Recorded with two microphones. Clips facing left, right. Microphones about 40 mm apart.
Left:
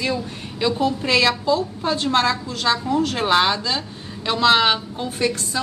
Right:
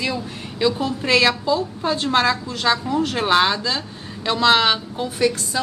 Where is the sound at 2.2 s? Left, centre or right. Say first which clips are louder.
Right 1 dB; centre.